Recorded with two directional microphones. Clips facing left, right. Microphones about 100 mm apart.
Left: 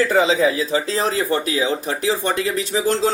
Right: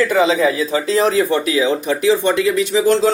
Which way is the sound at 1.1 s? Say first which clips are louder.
Right 5 dB; 35° left (ahead or behind).